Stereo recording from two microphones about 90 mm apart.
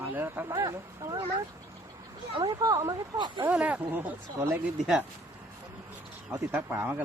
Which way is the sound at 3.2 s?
55° right (ahead or behind).